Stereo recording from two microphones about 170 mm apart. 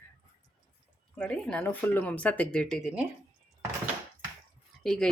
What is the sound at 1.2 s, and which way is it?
Speech, 5° left (ahead or behind).